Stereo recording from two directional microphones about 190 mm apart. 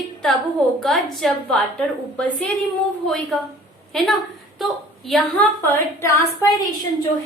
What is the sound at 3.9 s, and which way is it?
A woman's voice, centre (ahead or behind).